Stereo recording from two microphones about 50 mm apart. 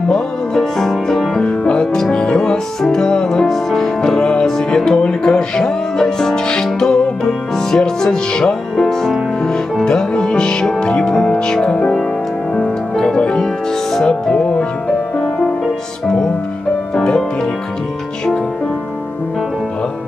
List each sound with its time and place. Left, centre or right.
0.1 s music: centre
1.4 s music: centre
8.8 s music: centre
9.8 s music: centre
14.3 s music: left
16.9 s music: centre